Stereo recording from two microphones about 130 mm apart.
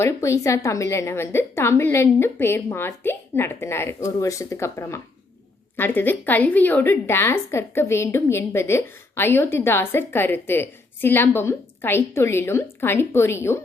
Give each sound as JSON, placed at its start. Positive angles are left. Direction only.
{"t": 0.0, "sound": "a woman's voice", "side_deg": 20}